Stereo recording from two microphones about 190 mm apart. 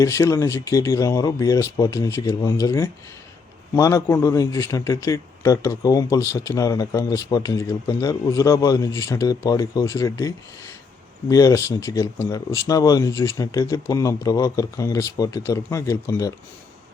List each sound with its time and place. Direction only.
0.0 s a man's voice: 15° left (ahead or behind)